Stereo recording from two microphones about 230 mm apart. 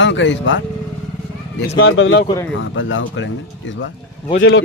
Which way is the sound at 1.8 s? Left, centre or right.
Left.